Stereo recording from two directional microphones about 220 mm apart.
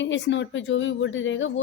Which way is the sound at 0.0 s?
55° left (ahead or behind).